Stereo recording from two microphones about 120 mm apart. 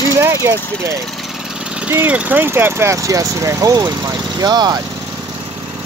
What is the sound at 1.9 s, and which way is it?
Speech, 15° right (ahead or behind).